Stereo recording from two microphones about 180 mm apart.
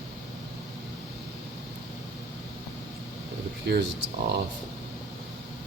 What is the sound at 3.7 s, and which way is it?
Speech, 70° right (ahead or behind).